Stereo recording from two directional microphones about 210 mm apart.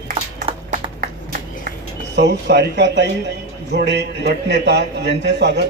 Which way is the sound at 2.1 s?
55° right (ahead or behind).